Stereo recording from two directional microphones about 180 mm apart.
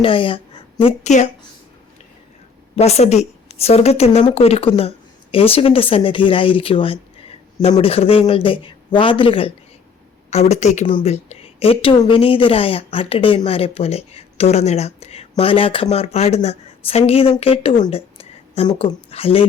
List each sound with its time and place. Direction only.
0.0 s speech: 30° left (ahead or behind)
2.7 s a woman's voice: 35° left (ahead or behind)
17.9 s a sound: 35° left (ahead or behind)
18.9 s a woman's voice: 30° left (ahead or behind)